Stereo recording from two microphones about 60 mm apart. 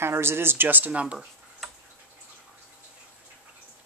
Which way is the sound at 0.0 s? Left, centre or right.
Right.